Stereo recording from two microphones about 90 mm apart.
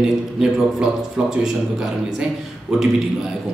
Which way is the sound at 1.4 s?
5° right (ahead or behind).